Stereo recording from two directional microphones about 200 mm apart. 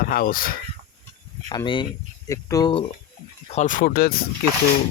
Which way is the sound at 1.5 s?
25° left (ahead or behind).